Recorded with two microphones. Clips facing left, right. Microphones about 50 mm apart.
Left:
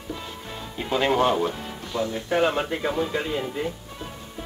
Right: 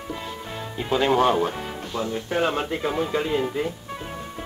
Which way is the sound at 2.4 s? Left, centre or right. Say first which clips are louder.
Left 1 dB; centre.